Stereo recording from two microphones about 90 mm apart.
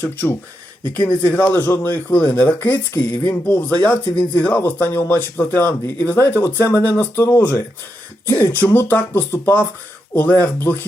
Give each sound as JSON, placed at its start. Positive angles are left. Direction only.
{"t": 0.0, "sound": "speech", "side_deg": 20}